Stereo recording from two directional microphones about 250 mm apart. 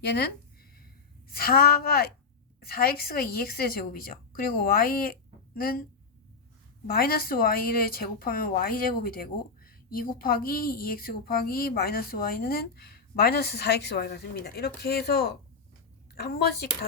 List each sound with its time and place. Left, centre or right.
0.0 s speech: left
6.8 s speech: left